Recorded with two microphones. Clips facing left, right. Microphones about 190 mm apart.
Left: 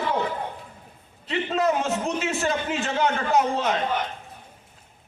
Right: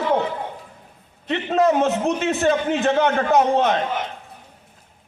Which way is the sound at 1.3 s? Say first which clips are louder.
Right 5 dB; 60° right (ahead or behind).